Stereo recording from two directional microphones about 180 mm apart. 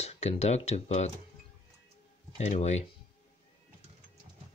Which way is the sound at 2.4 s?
40° left (ahead or behind).